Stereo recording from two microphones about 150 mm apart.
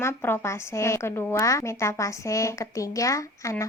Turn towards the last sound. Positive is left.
turn(degrees=20)  # may be behind; listen again after turning